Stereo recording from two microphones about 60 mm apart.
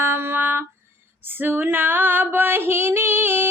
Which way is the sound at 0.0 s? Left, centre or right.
Right.